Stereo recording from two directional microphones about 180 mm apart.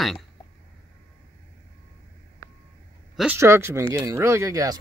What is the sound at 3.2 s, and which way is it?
Speech, 10° right (ahead or behind).